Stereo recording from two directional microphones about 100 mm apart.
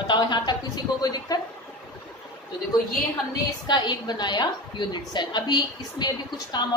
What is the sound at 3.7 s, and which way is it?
A woman's voice, 50° left (ahead or behind).